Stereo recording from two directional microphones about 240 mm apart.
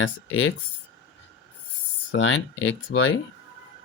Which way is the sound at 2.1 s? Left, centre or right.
Left.